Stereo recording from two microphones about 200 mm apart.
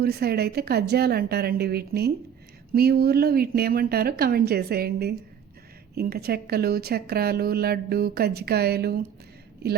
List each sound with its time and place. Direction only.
0.0 s a woman's voice: 50° right (ahead or behind)